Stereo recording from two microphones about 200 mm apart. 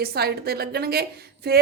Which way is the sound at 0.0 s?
55° right (ahead or behind).